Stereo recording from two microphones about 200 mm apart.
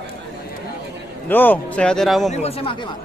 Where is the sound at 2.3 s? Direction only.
30° left (ahead or behind).